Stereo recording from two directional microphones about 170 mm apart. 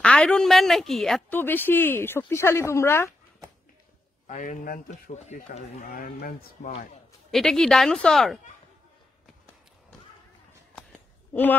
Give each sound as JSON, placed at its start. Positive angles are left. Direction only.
{"t": 0.0, "sound": "a woman's voice", "side_deg": 5}
{"t": 4.3, "sound": "speech", "side_deg": 50}
{"t": 7.2, "sound": "a woman's voice", "side_deg": 0}